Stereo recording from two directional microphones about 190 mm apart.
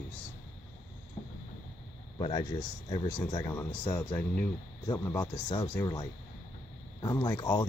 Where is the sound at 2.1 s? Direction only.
20° left (ahead or behind).